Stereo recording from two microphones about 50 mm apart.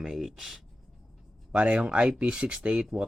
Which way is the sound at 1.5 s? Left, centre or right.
Right.